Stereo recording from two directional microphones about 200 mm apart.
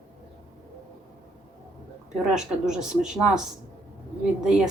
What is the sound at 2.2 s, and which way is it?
A woman's voice, 5° right (ahead or behind).